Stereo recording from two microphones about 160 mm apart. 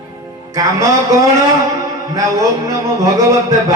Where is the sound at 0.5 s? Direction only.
20° right (ahead or behind).